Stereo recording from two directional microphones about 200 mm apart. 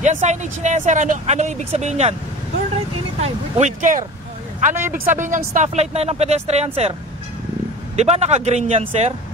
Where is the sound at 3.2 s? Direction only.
35° right (ahead or behind).